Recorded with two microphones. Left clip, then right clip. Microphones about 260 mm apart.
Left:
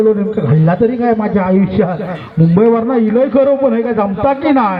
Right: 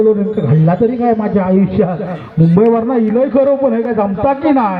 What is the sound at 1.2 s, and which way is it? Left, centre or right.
A man's voice, left.